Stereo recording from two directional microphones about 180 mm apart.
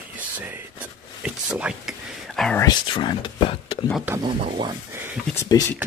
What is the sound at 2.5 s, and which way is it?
Speech, 25° left (ahead or behind).